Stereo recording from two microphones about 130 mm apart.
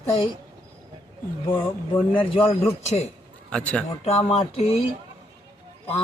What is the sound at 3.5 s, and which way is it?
Speech, 5° left (ahead or behind).